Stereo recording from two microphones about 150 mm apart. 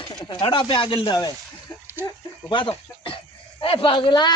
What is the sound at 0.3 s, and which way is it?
Speech, 35° left (ahead or behind).